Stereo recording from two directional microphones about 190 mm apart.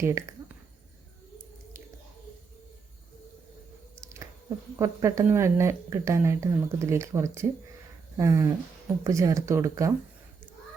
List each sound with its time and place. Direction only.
0.0 s speech: 15° right (ahead or behind)
4.0 s speech: 15° right (ahead or behind)